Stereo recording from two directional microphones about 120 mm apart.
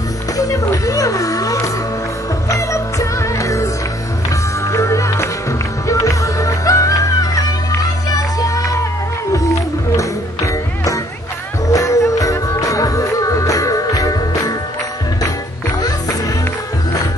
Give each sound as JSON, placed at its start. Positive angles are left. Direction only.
{"t": 0.4, "sound": "music", "side_deg": 30}